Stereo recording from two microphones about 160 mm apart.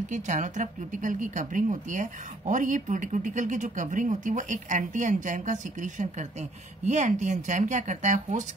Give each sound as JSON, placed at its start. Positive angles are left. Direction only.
{"t": 0.1, "sound": "speech", "side_deg": -50}